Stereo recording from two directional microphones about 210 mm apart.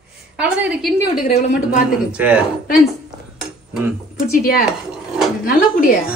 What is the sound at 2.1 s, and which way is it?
Speech, 5° right (ahead or behind).